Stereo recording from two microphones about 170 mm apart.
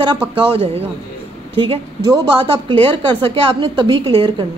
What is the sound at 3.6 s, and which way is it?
Speech, 25° right (ahead or behind).